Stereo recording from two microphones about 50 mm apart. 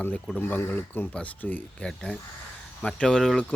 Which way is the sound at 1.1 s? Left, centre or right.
Left.